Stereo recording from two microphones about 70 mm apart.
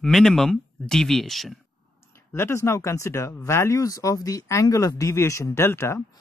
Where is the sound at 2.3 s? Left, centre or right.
Left.